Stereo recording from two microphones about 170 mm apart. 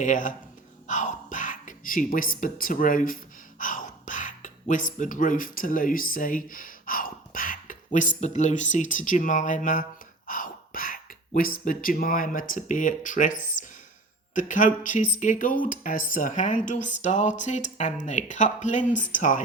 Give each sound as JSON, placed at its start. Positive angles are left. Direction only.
{"t": 0.0, "sound": "speech", "side_deg": 50}
{"t": 3.6, "sound": "a sound", "side_deg": 50}
{"t": 8.2, "sound": "speech", "side_deg": 45}